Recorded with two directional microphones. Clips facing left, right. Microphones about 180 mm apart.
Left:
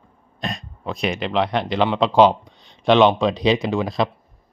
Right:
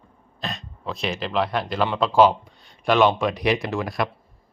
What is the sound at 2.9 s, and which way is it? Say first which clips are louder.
Speech: left 4 dB; 20° left (ahead or behind).